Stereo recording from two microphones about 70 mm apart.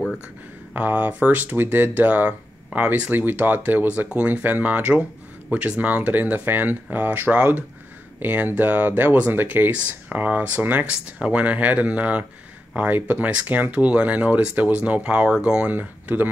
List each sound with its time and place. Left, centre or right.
0.7 s speech: right
15.7 s speech: right